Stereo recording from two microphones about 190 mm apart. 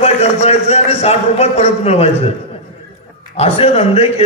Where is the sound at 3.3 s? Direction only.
30° left (ahead or behind).